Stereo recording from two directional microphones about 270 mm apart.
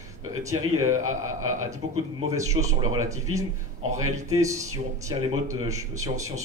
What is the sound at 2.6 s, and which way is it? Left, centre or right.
Speech, right.